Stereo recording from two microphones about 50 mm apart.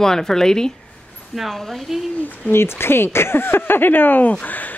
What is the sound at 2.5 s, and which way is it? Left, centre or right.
A woman's voice, left.